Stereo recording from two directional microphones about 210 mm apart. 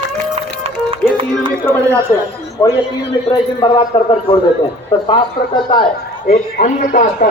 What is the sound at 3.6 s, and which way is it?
A man's voice, 25° left (ahead or behind).